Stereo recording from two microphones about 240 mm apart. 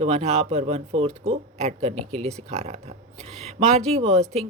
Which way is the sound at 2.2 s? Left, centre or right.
Right.